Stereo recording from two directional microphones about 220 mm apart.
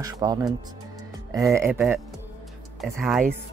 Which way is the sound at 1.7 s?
Centre (ahead or behind).